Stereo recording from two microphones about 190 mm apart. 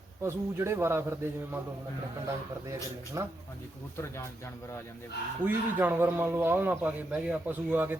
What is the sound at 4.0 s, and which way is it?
Speech, 15° left (ahead or behind).